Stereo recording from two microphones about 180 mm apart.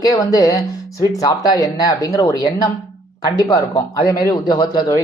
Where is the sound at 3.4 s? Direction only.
20° left (ahead or behind).